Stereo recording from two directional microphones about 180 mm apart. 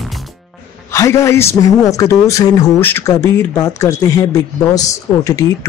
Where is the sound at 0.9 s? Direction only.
15° left (ahead or behind).